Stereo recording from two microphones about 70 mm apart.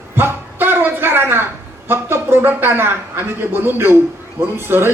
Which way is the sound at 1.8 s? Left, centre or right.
Right.